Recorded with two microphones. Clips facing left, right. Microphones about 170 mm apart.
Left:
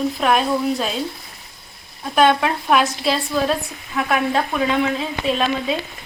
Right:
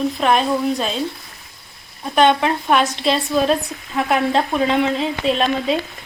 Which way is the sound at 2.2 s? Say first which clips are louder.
Right 1 dB; 5° left (ahead or behind).